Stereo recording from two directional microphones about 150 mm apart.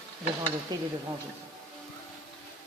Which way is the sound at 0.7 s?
25° right (ahead or behind).